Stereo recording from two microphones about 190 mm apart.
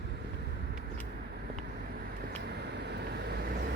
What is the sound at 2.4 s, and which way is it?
Vehicle, 60° right (ahead or behind).